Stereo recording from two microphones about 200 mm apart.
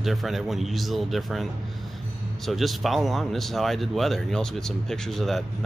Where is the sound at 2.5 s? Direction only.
Centre (ahead or behind).